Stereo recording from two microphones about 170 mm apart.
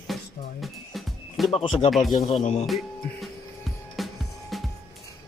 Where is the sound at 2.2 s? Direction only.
40° left (ahead or behind).